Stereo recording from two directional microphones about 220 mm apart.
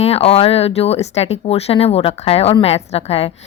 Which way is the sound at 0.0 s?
25° left (ahead or behind).